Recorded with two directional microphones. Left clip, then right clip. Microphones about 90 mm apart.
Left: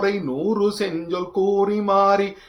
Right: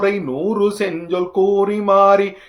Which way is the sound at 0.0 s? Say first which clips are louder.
Right 4 dB; 30° right (ahead or behind).